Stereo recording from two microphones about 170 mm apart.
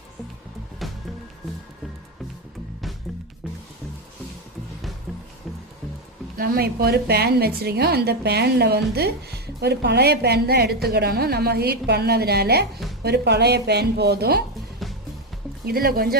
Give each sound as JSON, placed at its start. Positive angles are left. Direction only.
{"t": 0.8, "sound": "music", "side_deg": 0}
{"t": 6.3, "sound": "a woman's voice", "side_deg": -60}
{"t": 14.8, "sound": "music", "side_deg": 0}
{"t": 15.6, "sound": "speech", "side_deg": -60}